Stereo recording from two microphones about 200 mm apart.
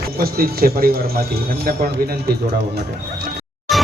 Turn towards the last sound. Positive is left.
turn(degrees=0)  # may be behind; listen again after turning